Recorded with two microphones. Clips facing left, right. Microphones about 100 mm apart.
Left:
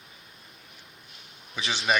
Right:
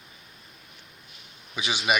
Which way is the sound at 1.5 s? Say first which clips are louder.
Right 1 dB; 15° right (ahead or behind).